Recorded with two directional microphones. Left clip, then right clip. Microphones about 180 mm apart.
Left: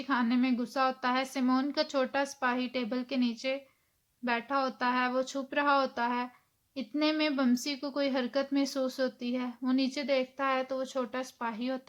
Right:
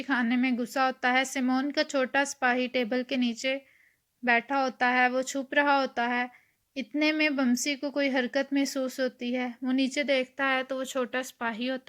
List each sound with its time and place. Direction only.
0.0 s a woman's voice: 20° right (ahead or behind)